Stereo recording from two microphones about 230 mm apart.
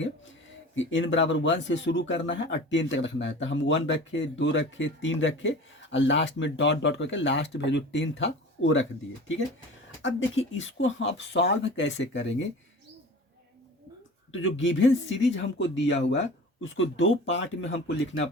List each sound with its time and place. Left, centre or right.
0.8 s speech: left
14.3 s speech: left